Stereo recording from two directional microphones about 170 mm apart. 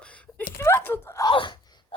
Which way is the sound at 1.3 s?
30° left (ahead or behind).